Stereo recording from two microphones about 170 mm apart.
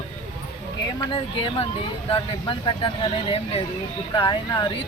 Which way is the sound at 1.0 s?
30° left (ahead or behind).